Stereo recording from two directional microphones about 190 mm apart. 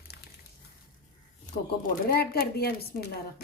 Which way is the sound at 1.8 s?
50° left (ahead or behind).